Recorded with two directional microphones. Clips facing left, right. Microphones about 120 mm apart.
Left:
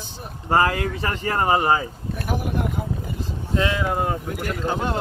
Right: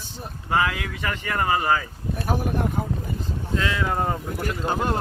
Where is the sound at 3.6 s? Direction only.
20° left (ahead or behind).